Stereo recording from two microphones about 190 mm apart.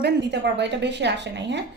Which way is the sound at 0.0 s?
60° right (ahead or behind).